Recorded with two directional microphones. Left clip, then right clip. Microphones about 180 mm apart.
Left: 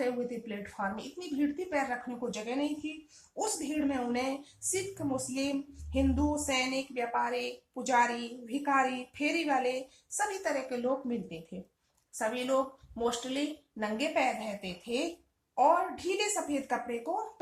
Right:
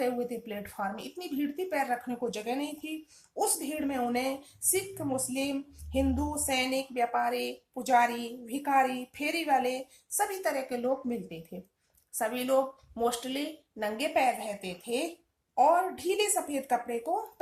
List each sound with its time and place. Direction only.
0.0 s a woman's voice: 50° right (ahead or behind)